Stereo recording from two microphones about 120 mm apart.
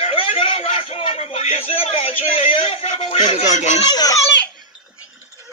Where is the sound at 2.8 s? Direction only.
65° left (ahead or behind).